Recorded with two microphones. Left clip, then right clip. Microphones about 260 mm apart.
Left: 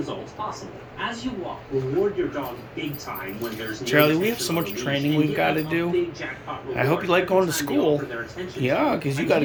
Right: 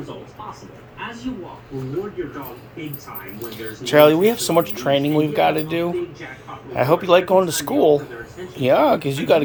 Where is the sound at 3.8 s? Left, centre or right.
Centre.